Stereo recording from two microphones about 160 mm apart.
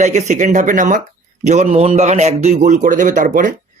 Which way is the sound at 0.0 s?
45° right (ahead or behind).